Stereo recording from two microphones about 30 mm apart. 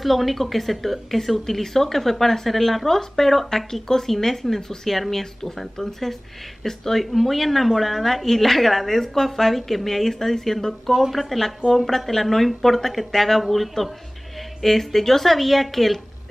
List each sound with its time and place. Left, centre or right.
0.0 s a woman's voice: centre
7.0 s a woman's voice: centre
11.7 s a woman's voice: centre